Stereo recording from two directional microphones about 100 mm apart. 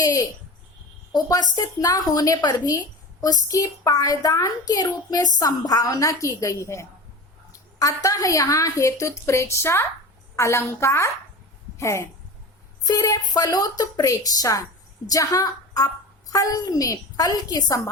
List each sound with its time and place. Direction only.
0.0 s a woman's voice: 35° left (ahead or behind)
12.8 s a woman's voice: 40° left (ahead or behind)